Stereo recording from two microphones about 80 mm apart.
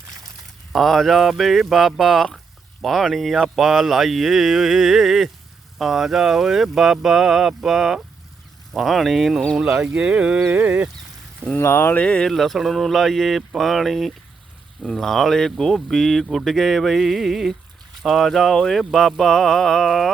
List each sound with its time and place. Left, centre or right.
0.7 s speech: centre
9.8 s speech: centre
11.5 s speech: left
11.9 s speech: centre
12.3 s speech: centre